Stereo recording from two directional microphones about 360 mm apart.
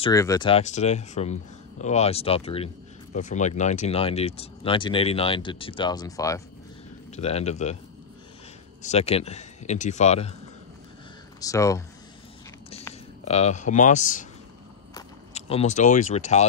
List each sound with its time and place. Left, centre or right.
0.0 s speech: centre
8.8 s a man's voice: centre
11.4 s speech: centre